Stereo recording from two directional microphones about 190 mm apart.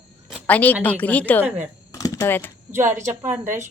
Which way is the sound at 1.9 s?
15° left (ahead or behind).